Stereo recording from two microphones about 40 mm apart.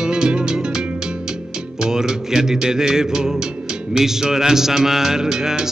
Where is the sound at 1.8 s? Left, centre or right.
Centre.